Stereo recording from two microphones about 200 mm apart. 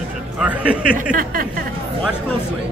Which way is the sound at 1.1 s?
45° right (ahead or behind).